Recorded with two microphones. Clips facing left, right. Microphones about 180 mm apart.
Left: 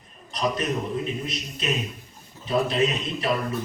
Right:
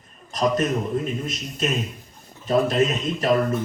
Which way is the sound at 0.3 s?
45° right (ahead or behind).